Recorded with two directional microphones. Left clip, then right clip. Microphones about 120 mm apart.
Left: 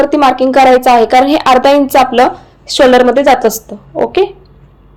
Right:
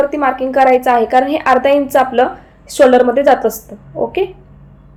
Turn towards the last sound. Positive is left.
turn(degrees=40)  # may be behind; listen again after turning